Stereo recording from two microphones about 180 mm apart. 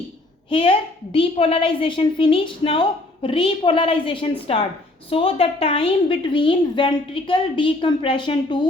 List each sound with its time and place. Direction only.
0.5 s a woman's voice: 30° left (ahead or behind)